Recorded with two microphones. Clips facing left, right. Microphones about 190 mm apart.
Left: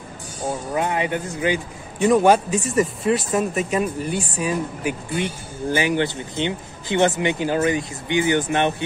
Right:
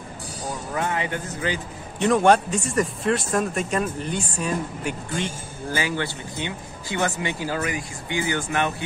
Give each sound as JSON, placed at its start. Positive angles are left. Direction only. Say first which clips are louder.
{"t": 0.7, "sound": "speech", "louder": "left 3 dB", "side_deg": 20}
{"t": 2.0, "sound": "speech", "louder": "left 2 dB", "side_deg": 5}
{"t": 5.7, "sound": "speech", "louder": "left 6 dB", "side_deg": 20}